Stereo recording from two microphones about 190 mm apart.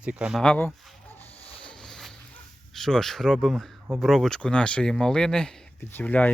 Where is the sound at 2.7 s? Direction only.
Centre (ahead or behind).